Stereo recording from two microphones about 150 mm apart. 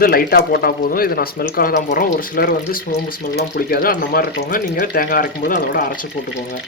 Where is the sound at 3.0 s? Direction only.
90° left; by 5.9 s 70° left (ahead or behind).